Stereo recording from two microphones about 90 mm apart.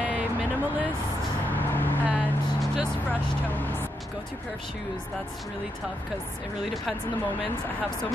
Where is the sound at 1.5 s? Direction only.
20° left (ahead or behind).